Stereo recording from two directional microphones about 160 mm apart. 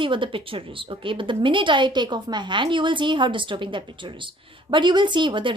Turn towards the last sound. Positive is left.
turn(degrees=-30)  # may be behind; listen again after turning